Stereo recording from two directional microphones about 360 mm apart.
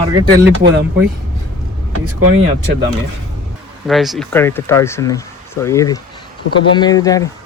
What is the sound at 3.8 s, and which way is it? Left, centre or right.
Speech, centre.